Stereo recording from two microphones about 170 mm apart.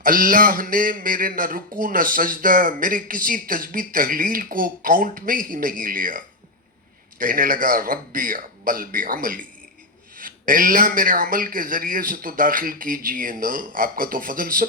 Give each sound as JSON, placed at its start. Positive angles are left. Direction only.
{"t": 0.0, "sound": "a man's voice", "side_deg": -55}